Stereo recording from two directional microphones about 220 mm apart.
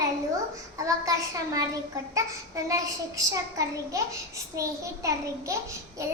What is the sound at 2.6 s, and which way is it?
A child's voice, 15° right (ahead or behind).